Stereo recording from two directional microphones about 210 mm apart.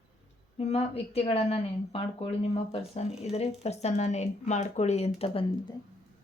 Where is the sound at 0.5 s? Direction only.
30° left (ahead or behind).